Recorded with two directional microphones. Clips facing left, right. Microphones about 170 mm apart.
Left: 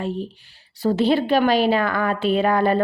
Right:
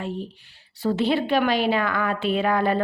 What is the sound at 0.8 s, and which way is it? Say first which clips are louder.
Speech: left 3 dB; 40° left (ahead or behind).